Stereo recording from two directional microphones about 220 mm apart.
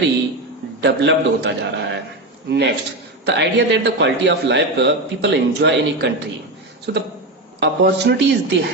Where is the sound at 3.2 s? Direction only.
50° right (ahead or behind).